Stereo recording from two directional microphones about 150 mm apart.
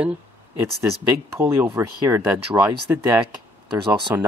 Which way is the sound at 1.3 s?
15° right (ahead or behind).